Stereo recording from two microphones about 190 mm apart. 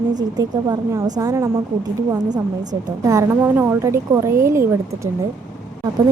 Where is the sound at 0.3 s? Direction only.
20° right (ahead or behind).